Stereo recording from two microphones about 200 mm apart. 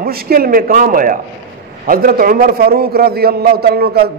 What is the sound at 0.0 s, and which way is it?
A man's voice, 50° right (ahead or behind).